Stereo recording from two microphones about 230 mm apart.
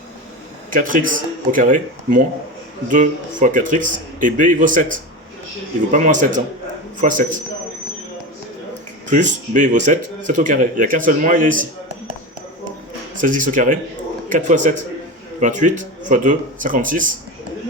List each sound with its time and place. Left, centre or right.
0.7 s speech: right
8.7 s speech: right
13.1 s speech: right